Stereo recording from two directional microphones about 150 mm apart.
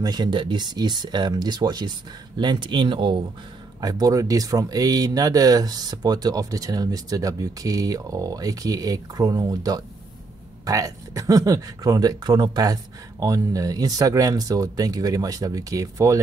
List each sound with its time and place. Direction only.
0.0 s speech: 30° right (ahead or behind)
3.8 s speech: 25° right (ahead or behind)